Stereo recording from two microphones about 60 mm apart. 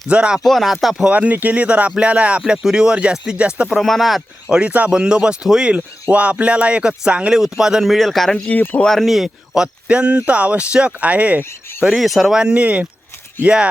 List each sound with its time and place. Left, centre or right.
0.1 s speech: centre
0.3 s speech: centre
1.1 s speech: right
3.7 s speech: centre
4.4 s speech: centre
8.4 s speech: left
8.8 s speech: centre; by 11.4 s right
11.9 s speech: centre
12.4 s speech: centre